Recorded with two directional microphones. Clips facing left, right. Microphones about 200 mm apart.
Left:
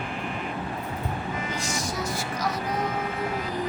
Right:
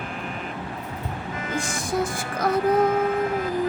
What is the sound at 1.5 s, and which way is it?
Music, 55° right (ahead or behind).